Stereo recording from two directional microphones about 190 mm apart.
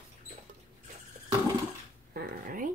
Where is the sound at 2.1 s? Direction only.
50° right (ahead or behind).